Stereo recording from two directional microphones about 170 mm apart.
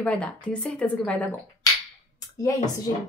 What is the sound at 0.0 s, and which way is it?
Speech, 5° left (ahead or behind).